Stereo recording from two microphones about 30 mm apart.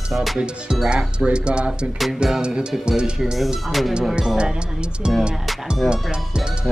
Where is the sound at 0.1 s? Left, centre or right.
Centre.